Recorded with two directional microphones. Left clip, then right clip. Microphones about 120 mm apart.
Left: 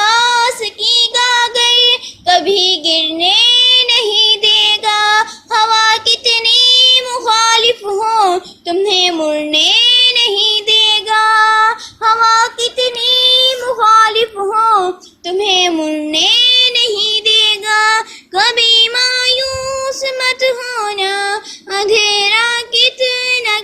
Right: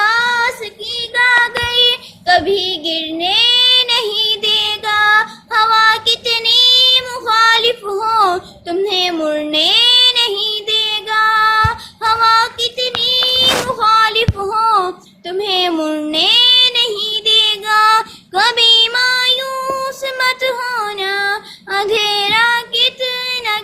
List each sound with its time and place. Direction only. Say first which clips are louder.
0.0 s child singing: left 3 dB; 30° left (ahead or behind)
0.9 s child singing: left 2 dB; 50° left (ahead or behind)
1.8 s child singing: left 2 dB; 20° left (ahead or behind)
7.9 s a sound: even; 15° left (ahead or behind)
8.6 s child singing: left 4 dB; 30° left (ahead or behind)
9.2 s child singing: left 2 dB; 25° left (ahead or behind)
10.8 s female singing: left 2 dB; 30° left (ahead or behind); by 14.9 s 10° left (ahead or behind)
15.3 s child singing: left 4 dB; 20° left (ahead or behind)
15.7 s child singing: left 1 dB; 5° right (ahead or behind); by 17.7 s 15° left (ahead or behind)
17.7 s child singing: right 1 dB; centre (ahead or behind)
18.9 s child singing: left 1 dB; 15° left (ahead or behind)
20.0 s child singing: left 3 dB; 5° left (ahead or behind)
20.7 s female singing: left 2 dB; 30° left (ahead or behind)
21.7 s child singing: left 3 dB; 10° left (ahead or behind)